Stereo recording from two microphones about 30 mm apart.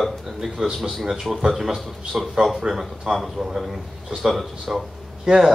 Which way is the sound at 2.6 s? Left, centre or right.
Centre.